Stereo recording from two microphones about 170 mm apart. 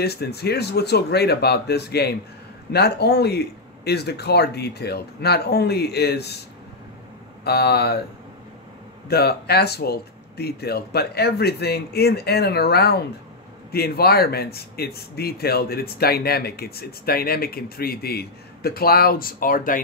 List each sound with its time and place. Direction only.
0.0 s speech: 70° left (ahead or behind)
7.4 s speech: 70° left (ahead or behind)
9.1 s speech: 70° left (ahead or behind)